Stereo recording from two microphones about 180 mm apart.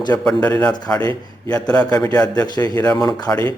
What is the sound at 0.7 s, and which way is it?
Speech, 20° left (ahead or behind).